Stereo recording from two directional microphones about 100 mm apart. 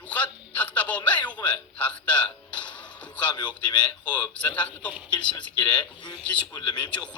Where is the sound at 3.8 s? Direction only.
10° left (ahead or behind).